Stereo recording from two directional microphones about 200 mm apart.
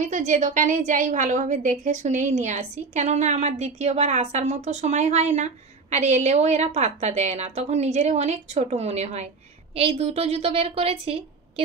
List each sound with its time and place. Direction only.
0.0 s a woman's voice: 40° right (ahead or behind)